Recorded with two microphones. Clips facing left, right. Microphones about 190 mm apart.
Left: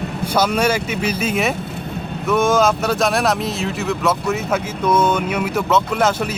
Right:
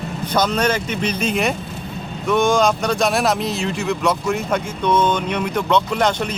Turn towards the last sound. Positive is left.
turn(degrees=5)  # may be behind; listen again after turning